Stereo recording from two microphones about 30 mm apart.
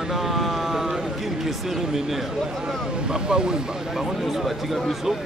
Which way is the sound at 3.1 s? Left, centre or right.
Right.